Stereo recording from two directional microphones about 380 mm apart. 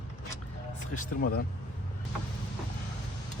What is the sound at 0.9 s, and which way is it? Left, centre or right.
Speech, left.